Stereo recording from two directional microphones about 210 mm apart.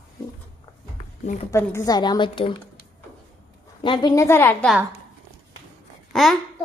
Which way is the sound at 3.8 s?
20° left (ahead or behind).